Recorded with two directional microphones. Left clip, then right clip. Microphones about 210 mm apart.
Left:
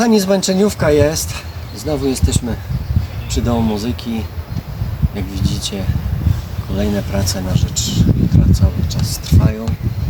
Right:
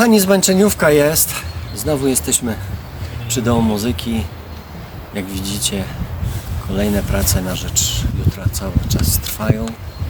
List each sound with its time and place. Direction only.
0.0 s speech: 10° right (ahead or behind)